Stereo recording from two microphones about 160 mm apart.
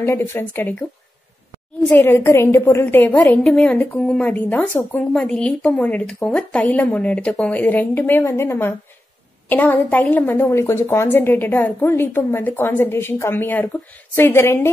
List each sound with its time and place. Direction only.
0.0 s a woman's voice: 15° left (ahead or behind)
1.9 s a woman's voice: 15° left (ahead or behind)